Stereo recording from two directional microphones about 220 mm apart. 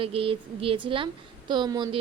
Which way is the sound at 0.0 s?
25° right (ahead or behind).